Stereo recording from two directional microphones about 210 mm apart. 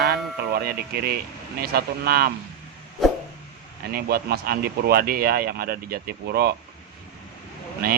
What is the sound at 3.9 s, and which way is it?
Speech, 45° right (ahead or behind).